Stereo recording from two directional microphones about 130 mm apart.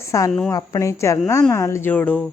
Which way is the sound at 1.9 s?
10° left (ahead or behind).